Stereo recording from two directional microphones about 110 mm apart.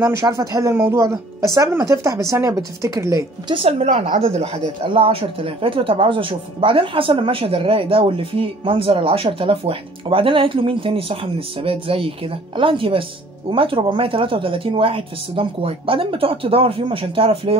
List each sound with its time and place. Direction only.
0.0 s speech: 25° right (ahead or behind)
3.5 s a woman's voice: 65° right (ahead or behind)